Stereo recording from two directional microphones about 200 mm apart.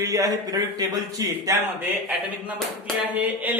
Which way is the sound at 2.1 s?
5° right (ahead or behind).